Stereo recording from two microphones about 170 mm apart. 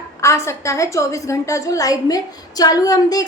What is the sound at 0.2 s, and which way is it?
A woman's voice, 15° left (ahead or behind).